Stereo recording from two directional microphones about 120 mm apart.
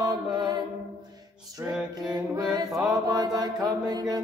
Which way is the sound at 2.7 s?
5° right (ahead or behind).